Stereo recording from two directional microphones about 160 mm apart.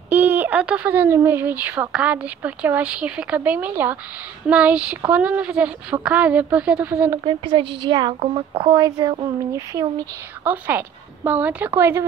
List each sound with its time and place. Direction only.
0.1 s speech: 10° right (ahead or behind)
7.2 s a woman's voice: 30° right (ahead or behind)
10.4 s speech: 10° right (ahead or behind)